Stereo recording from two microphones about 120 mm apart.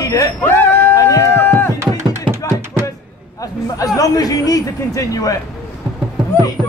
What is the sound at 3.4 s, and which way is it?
Speech, 30° left (ahead or behind).